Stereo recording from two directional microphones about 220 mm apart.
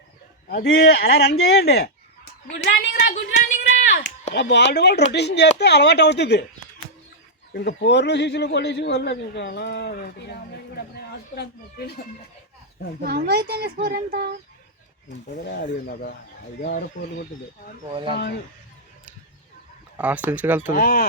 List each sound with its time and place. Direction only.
0.5 s a man's voice: 50° left (ahead or behind)
3.3 s a sound: 35° left (ahead or behind)
4.4 s a man's voice: 50° left (ahead or behind)
7.5 s a man's voice: 50° left (ahead or behind)
13.1 s speech: 45° right (ahead or behind)
15.4 s a man's voice: 45° left (ahead or behind)
20.0 s speech: 5° right (ahead or behind)
20.7 s a man's voice: 40° left (ahead or behind)